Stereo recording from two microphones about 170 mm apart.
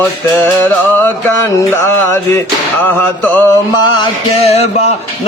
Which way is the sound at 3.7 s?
35° left (ahead or behind).